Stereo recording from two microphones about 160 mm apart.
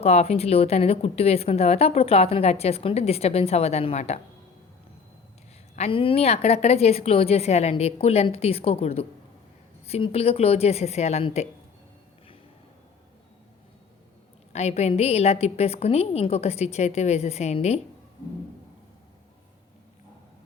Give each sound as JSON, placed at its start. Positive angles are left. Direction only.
{"t": 0.0, "sound": "a woman's voice", "side_deg": 40}
{"t": 5.7, "sound": "a woman's voice", "side_deg": 40}
{"t": 14.5, "sound": "a woman's voice", "side_deg": 45}